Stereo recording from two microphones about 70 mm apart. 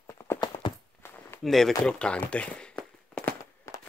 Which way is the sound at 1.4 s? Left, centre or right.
Centre.